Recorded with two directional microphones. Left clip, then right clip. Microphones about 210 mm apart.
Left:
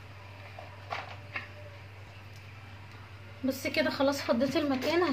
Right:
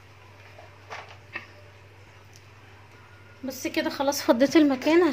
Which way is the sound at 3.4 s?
25° right (ahead or behind).